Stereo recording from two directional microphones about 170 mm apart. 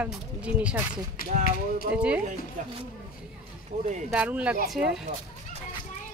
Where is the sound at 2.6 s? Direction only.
50° right (ahead or behind).